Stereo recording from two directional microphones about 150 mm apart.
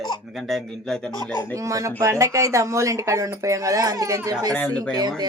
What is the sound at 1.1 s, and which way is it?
Speech, 25° right (ahead or behind).